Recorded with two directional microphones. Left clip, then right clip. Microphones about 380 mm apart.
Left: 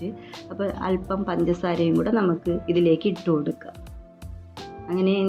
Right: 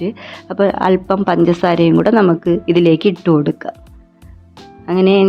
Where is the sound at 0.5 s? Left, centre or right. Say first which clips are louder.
Right 13 dB; right.